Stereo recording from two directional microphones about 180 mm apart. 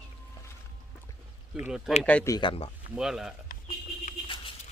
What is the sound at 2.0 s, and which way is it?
Speech, 5° left (ahead or behind).